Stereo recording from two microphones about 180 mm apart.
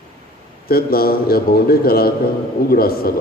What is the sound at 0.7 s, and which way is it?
A man's voice, 55° left (ahead or behind).